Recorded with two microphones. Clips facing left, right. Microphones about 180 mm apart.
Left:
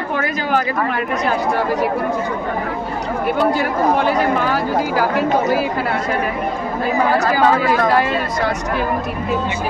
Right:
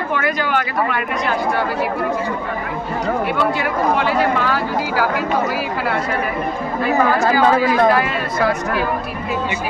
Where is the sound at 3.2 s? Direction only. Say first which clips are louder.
Left 2 dB; 40° left (ahead or behind).